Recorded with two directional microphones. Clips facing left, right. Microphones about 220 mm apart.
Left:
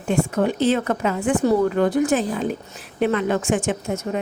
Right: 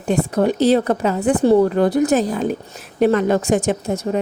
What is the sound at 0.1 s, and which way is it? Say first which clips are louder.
A woman's voice: right 3 dB; 35° right (ahead or behind).